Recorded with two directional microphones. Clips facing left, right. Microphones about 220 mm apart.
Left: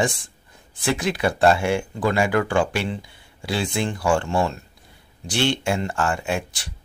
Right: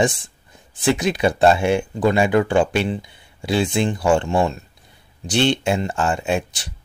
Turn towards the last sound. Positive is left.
turn(degrees=-20)  # may be behind; listen again after turning